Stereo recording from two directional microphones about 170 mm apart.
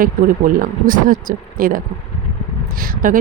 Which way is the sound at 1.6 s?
55° right (ahead or behind).